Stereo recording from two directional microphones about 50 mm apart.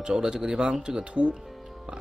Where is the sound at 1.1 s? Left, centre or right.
Right.